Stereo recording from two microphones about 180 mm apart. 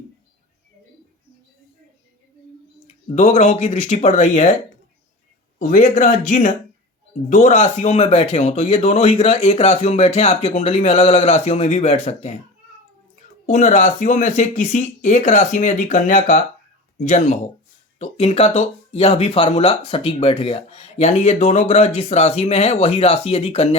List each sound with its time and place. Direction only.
2.8 s speech: 35° left (ahead or behind)
5.5 s speech: 45° left (ahead or behind)
13.5 s speech: 45° left (ahead or behind)